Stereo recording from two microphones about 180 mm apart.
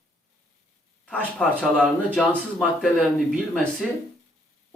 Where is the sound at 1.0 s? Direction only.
5° left (ahead or behind).